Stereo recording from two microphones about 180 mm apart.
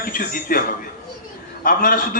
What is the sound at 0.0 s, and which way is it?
Speech, 55° left (ahead or behind).